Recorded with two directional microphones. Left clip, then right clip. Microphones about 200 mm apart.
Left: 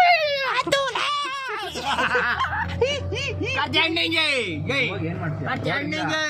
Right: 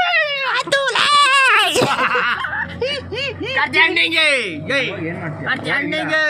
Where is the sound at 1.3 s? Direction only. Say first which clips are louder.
Right 16 dB; 20° right (ahead or behind).